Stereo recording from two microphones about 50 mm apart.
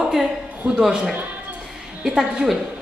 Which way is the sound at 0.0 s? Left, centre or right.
Centre.